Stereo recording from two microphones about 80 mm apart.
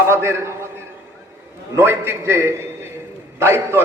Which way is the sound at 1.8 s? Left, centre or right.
Right.